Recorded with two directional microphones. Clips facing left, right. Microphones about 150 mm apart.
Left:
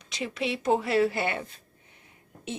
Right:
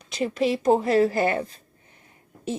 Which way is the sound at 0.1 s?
45° right (ahead or behind).